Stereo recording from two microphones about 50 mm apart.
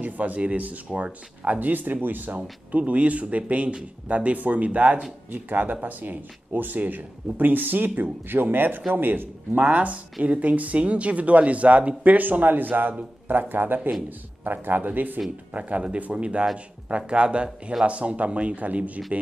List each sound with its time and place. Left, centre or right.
0.0 s speech: right
2.7 s a man's voice: right
9.7 s speech: right